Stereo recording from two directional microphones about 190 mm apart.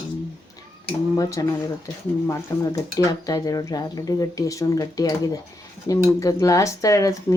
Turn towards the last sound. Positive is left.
turn(degrees=15)  # may be behind; listen again after turning